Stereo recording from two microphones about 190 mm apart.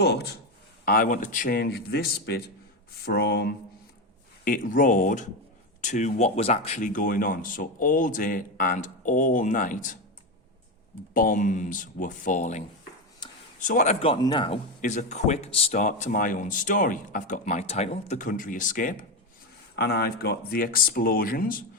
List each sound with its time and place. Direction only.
0.0 s speech: 55° left (ahead or behind)
0.9 s speech: 45° left (ahead or behind)
4.4 s speech: 45° left (ahead or behind)
11.1 s speech: 45° left (ahead or behind)
13.2 s a sound: 25° left (ahead or behind)
13.7 s speech: 40° left (ahead or behind)
14.0 s a man's voice: 25° left (ahead or behind)
14.8 s speech: 40° left (ahead or behind)
19.7 s speech: 60° left (ahead or behind)